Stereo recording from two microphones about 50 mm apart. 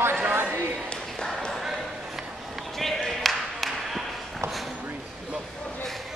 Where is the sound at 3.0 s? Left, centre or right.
Centre.